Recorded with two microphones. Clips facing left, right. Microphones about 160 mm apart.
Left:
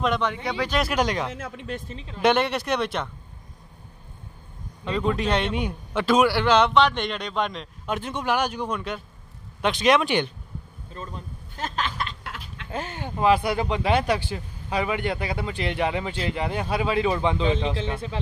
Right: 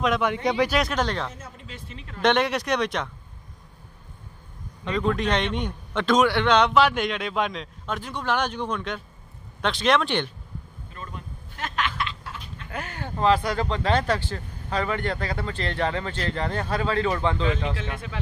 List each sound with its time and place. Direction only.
0.0 s a man's voice: centre (ahead or behind)
0.3 s speech: 15° right (ahead or behind)
0.7 s a man's voice: centre (ahead or behind)
0.9 s speech: 10° left (ahead or behind)
1.3 s speech: 80° left
2.0 s speech: 10° left (ahead or behind)
2.3 s a man's voice: centre (ahead or behind)
4.9 s a man's voice: 5° left (ahead or behind)
7.8 s speech: 20° left (ahead or behind)
8.3 s speech: 10° left (ahead or behind)
10.9 s speech: 30° left (ahead or behind)
12.2 s a sound: 80° left
12.7 s speech: 25° left (ahead or behind)
13.2 s speech: 10° left (ahead or behind); by 18.2 s 30° left (ahead or behind)